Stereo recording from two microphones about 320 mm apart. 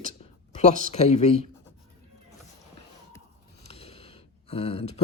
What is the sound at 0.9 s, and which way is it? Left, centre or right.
Speech, centre.